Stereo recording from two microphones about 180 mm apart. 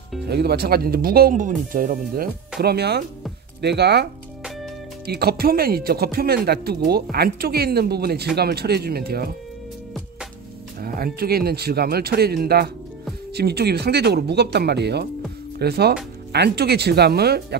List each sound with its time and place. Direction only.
0.3 s speech: 65° right (ahead or behind)
2.6 s speech: 65° right (ahead or behind)
10.8 s music: 55° right (ahead or behind)
11.1 s speech: 60° right (ahead or behind)